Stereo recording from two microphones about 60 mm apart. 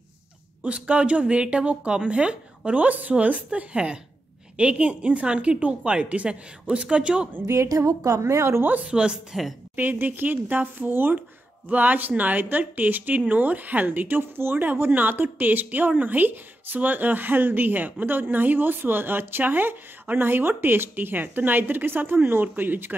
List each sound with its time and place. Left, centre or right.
0.7 s speech: centre
7.4 s a woman's voice: right
8.9 s speech: centre
9.8 s a woman's voice: right